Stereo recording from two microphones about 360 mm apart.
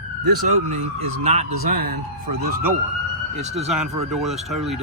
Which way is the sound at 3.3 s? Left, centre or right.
Centre.